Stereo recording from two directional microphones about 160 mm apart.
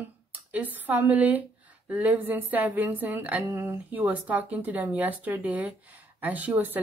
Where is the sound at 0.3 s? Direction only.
10° right (ahead or behind).